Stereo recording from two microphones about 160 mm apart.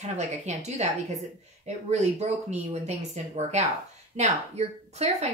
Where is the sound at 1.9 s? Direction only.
45° right (ahead or behind).